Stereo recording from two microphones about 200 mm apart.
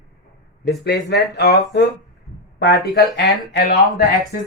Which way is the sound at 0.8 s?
55° left (ahead or behind).